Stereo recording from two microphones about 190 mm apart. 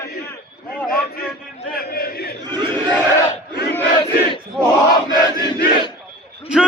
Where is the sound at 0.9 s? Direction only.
55° left (ahead or behind).